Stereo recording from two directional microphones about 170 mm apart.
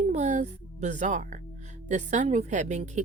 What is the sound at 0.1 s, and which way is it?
Speech, 45° right (ahead or behind).